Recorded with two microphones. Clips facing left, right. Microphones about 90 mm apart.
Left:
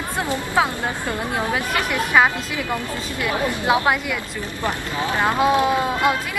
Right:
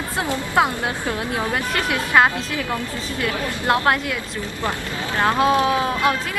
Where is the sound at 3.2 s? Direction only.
5° left (ahead or behind).